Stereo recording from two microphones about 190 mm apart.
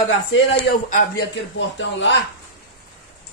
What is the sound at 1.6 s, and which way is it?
Speech, 75° left (ahead or behind).